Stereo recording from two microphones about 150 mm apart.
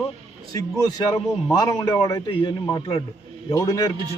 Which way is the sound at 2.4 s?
30° left (ahead or behind).